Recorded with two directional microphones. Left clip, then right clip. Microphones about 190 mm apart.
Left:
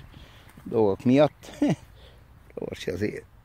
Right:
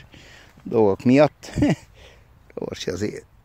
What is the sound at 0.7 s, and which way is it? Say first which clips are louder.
Speech: right 4 dB; 35° right (ahead or behind).